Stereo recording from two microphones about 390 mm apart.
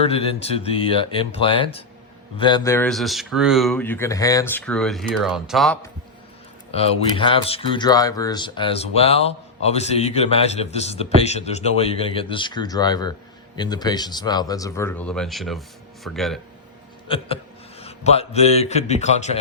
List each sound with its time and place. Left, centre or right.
0.0 s speech: centre
6.7 s speech: centre
17.1 s mantra: centre